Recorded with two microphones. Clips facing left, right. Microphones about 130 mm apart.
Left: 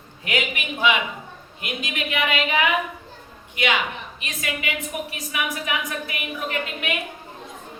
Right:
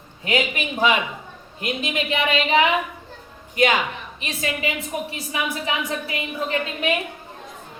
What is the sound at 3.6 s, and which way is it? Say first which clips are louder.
A man's voice: right 4 dB; 40° right (ahead or behind).